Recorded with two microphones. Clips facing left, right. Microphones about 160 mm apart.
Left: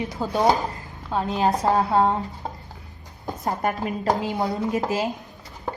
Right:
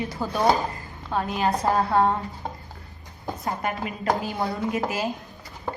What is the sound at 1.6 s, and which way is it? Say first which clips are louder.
Speech: even; 15° left (ahead or behind).